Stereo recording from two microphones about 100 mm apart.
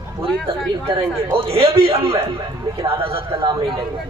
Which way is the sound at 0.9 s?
80° right.